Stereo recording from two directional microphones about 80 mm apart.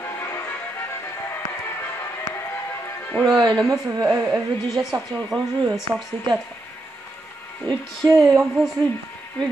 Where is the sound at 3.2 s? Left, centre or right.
Centre.